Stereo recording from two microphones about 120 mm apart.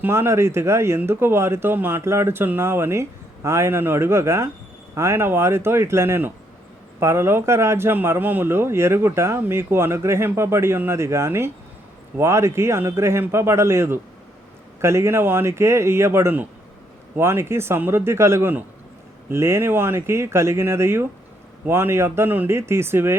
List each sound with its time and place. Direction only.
0.0 s speech: 20° right (ahead or behind)